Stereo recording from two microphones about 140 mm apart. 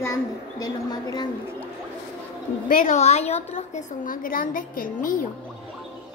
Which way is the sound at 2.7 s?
85° left.